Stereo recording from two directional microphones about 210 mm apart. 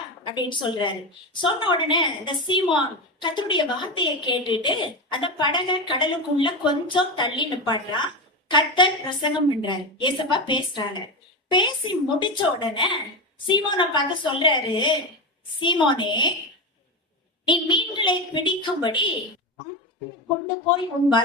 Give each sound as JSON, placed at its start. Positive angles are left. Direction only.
{"t": 0.3, "sound": "a woman's voice", "side_deg": 20}
{"t": 17.4, "sound": "a woman's voice", "side_deg": 20}